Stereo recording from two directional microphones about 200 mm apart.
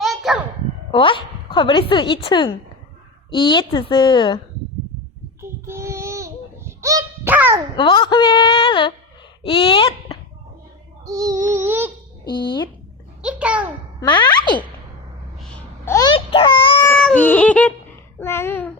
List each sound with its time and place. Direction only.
0.0 s a sound: centre (ahead or behind)
0.9 s a woman's voice: 25° left (ahead or behind)
5.4 s a sound: 15° right (ahead or behind)
7.8 s a woman's voice: 25° left (ahead or behind)
11.0 s child singing: 15° right (ahead or behind)
11.5 s a sound: 10° right (ahead or behind)
12.2 s speech: 25° left (ahead or behind)
13.2 s a child's voice: 5° right (ahead or behind)
14.0 s a woman's voice: 20° left (ahead or behind)
15.4 s babbling: 5° left (ahead or behind)
16.0 s baby cry: 25° left (ahead or behind)
16.9 s a sound: 5° left (ahead or behind)
18.2 s a child's voice: 10° left (ahead or behind)